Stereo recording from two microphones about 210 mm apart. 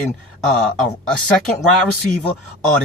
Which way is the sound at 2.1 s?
40° left (ahead or behind).